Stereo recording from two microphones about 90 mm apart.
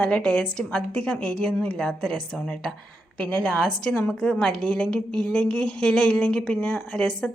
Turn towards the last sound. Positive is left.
turn(degrees=5)  # may be behind; listen again after turning